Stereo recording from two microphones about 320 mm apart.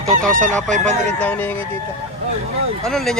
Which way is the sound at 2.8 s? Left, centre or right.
Centre.